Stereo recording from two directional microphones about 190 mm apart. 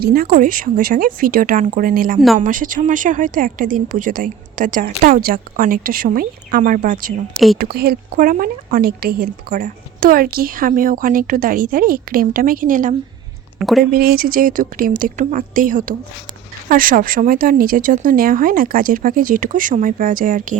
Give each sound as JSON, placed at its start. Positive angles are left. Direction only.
{"t": 0.0, "sound": "speech", "side_deg": -55}
{"t": 7.3, "sound": "speech", "side_deg": 0}
{"t": 7.6, "sound": "speech", "side_deg": -55}
{"t": 13.6, "sound": "speech", "side_deg": 0}
{"t": 13.9, "sound": "speech", "side_deg": -50}